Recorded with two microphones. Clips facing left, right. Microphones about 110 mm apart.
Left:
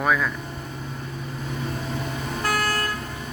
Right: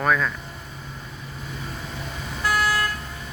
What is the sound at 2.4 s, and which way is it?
Vehicle, 50° left (ahead or behind).